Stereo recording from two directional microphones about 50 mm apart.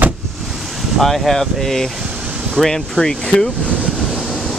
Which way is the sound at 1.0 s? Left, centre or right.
Centre.